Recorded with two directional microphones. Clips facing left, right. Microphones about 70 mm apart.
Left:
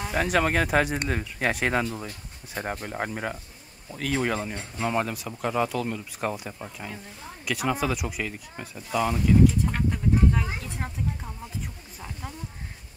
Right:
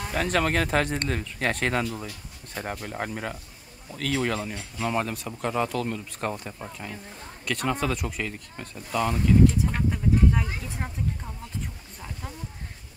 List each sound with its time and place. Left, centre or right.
0.0 s speech: centre